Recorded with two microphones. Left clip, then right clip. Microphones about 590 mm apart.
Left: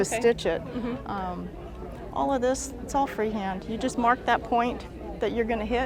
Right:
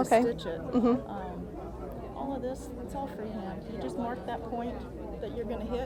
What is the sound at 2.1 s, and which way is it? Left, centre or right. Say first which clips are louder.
Speech: left 12 dB; left.